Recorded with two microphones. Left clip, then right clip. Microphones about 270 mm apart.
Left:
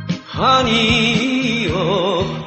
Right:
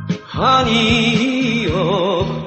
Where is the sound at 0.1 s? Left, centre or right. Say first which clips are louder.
Even; left.